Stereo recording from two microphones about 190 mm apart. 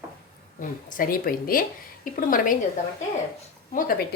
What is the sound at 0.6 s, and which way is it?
A woman's voice, 45° left (ahead or behind).